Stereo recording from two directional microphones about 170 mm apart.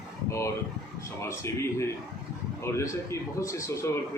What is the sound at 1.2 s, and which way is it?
Speech, 15° left (ahead or behind).